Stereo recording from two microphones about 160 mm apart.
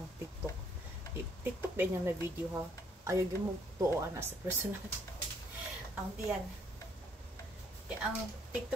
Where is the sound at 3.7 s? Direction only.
20° right (ahead or behind).